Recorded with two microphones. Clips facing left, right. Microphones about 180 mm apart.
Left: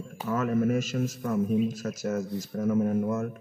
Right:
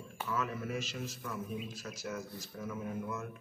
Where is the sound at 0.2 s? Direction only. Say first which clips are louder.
Left 11 dB; 45° left (ahead or behind).